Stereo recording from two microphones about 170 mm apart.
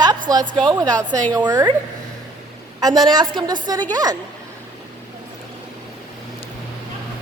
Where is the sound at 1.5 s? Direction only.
20° right (ahead or behind).